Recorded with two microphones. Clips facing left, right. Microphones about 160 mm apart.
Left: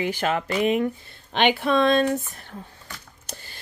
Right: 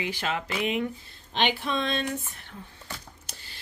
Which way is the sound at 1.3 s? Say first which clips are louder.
Left 7 dB; 60° left (ahead or behind).